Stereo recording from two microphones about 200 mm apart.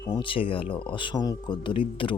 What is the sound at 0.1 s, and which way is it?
Speech, 25° left (ahead or behind).